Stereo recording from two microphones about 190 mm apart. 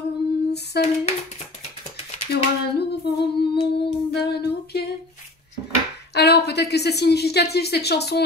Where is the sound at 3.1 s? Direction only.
60° left (ahead or behind).